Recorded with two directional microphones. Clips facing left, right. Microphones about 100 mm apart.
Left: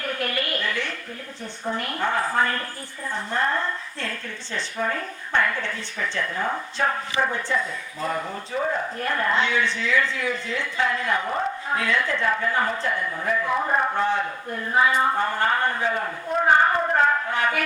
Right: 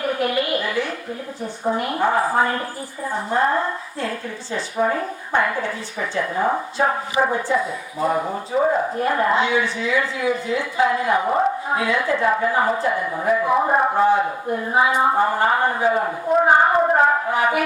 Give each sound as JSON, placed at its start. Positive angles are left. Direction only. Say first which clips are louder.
{"t": 0.0, "sound": "a sound", "louder": "right 7 dB", "side_deg": -15}
{"t": 1.7, "sound": "a man's voice", "louder": "right 5 dB", "side_deg": -15}
{"t": 7.2, "sound": "speech", "louder": "right 5 dB", "side_deg": -30}
{"t": 7.4, "sound": "speech", "louder": "right 5 dB", "side_deg": -10}
{"t": 8.5, "sound": "speech", "louder": "right 7 dB", "side_deg": -30}
{"t": 9.0, "sound": "a man's voice", "louder": "right 5 dB", "side_deg": -20}
{"t": 14.0, "sound": "speech", "louder": "right 7 dB", "side_deg": -10}